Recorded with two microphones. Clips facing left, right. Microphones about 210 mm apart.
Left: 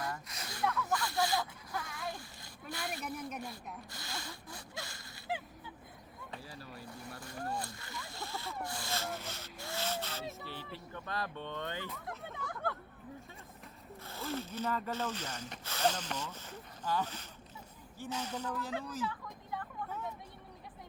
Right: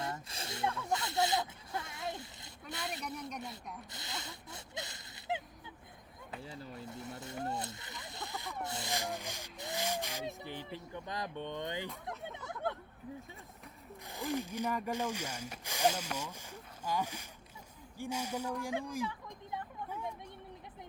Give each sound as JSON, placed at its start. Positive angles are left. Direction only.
{"t": 0.0, "sound": "a sound", "side_deg": -25}
{"t": 3.0, "sound": "speech", "side_deg": 5}
{"t": 3.4, "sound": "speech", "side_deg": -20}
{"t": 6.4, "sound": "speech", "side_deg": -20}
{"t": 14.1, "sound": "speech", "side_deg": -15}
{"t": 19.0, "sound": "a sound", "side_deg": -20}